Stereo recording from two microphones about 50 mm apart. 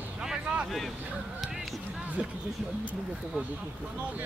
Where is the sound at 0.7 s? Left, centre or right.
Centre.